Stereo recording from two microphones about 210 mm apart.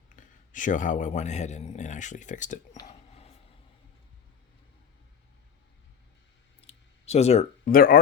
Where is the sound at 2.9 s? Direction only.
30° left (ahead or behind).